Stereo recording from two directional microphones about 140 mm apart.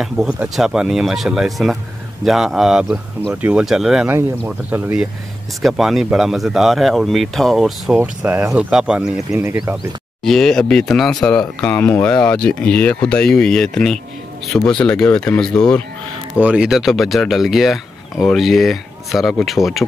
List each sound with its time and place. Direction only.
0.0 s speech: 5° right (ahead or behind)
9.3 s speech: 20° right (ahead or behind)
10.2 s speech: 5° left (ahead or behind)
16.3 s speech: 10° right (ahead or behind)